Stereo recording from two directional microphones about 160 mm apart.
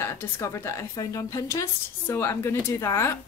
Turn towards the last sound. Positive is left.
turn(degrees=15)  # may be behind; listen again after turning